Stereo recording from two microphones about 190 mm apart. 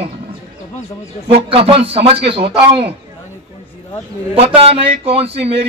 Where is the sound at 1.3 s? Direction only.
30° right (ahead or behind).